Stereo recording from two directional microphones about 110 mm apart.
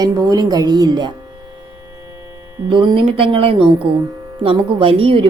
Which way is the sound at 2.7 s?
45° right (ahead or behind).